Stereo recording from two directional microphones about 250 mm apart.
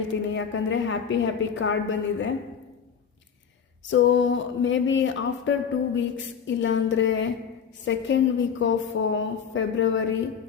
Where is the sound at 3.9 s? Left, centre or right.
Left.